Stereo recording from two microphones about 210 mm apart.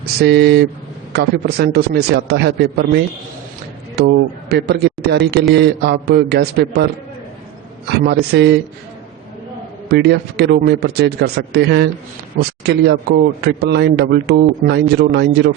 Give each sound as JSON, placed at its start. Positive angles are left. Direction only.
{"t": 0.2, "sound": "a man's voice", "side_deg": -50}
{"t": 7.9, "sound": "a man's voice", "side_deg": -50}
{"t": 9.9, "sound": "a man's voice", "side_deg": -50}